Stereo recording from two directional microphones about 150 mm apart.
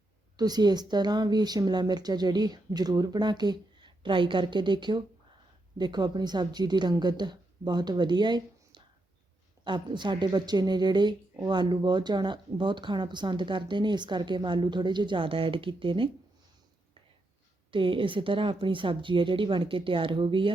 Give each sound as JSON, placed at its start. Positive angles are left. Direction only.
{"t": 0.3, "sound": "a woman's voice", "side_deg": -25}
{"t": 17.7, "sound": "speech", "side_deg": -35}